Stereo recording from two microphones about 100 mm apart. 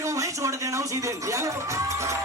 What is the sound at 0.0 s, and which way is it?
Music, 30° right (ahead or behind).